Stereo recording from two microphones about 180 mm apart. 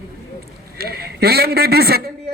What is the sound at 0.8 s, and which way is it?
A man's voice, 60° right (ahead or behind).